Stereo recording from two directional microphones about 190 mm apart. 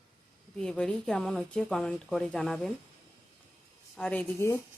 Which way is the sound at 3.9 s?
10° left (ahead or behind).